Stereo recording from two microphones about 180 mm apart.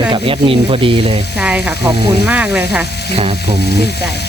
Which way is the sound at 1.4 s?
5° right (ahead or behind).